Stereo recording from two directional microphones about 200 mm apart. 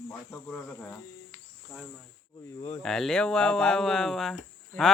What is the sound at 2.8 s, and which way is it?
Speech, centre (ahead or behind).